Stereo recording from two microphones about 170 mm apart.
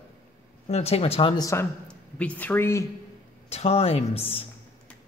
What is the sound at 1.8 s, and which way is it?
Speech, 5° left (ahead or behind).